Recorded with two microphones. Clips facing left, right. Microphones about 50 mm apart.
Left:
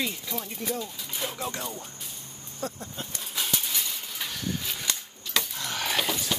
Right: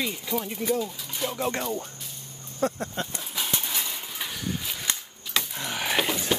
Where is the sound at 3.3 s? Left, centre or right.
Centre.